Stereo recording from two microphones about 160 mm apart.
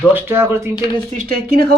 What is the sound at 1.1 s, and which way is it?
Speech, 70° right (ahead or behind).